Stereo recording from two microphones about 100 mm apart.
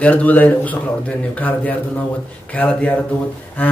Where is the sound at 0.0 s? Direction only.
15° left (ahead or behind).